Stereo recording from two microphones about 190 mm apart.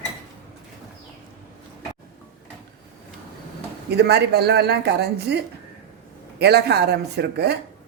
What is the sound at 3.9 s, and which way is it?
Speech, 60° right (ahead or behind).